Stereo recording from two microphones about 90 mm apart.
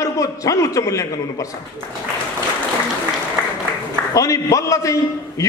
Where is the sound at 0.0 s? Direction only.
40° left (ahead or behind).